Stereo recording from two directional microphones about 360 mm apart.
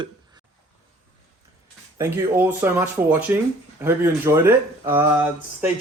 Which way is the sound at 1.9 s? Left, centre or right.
Centre.